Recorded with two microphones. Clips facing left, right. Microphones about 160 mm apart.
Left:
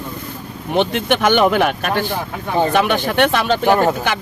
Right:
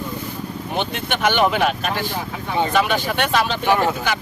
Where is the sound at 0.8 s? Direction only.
50° left (ahead or behind).